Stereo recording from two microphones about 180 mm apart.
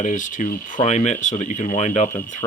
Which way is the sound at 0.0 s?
45° left (ahead or behind).